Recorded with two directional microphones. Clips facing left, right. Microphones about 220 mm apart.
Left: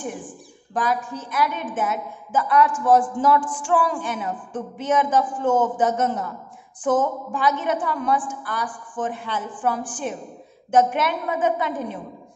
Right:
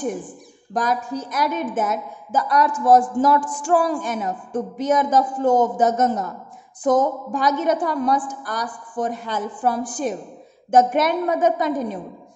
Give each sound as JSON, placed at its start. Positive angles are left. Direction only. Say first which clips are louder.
{"t": 0.7, "sound": "a woman's voice", "louder": "right 2 dB", "side_deg": -40}